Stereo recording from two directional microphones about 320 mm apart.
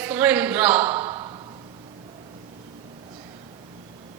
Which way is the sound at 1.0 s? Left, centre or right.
Centre.